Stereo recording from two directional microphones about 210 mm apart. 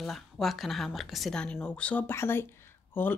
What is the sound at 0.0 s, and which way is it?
Speech, centre (ahead or behind).